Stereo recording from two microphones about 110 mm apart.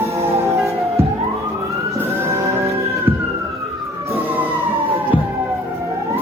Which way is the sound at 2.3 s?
25° right (ahead or behind).